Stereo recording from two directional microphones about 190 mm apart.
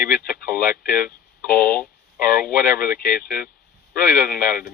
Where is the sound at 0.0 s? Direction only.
50° left (ahead or behind).